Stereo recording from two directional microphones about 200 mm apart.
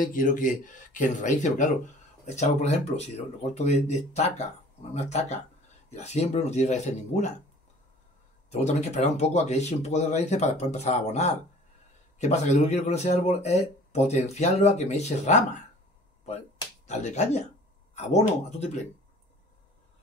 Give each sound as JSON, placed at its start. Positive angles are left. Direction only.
{"t": 0.0, "sound": "speech", "side_deg": 40}
{"t": 8.5, "sound": "speech", "side_deg": 35}
{"t": 16.8, "sound": "speech", "side_deg": 35}